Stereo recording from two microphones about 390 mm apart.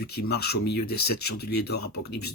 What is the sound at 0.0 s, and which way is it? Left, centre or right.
Speech, left.